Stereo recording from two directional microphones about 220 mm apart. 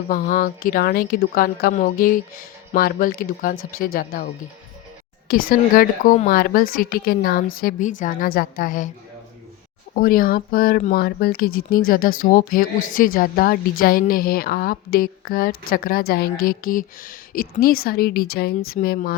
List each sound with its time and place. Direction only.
0.1 s speech: 40° left (ahead or behind)
5.3 s speech: 40° left (ahead or behind)
9.9 s speech: 40° left (ahead or behind)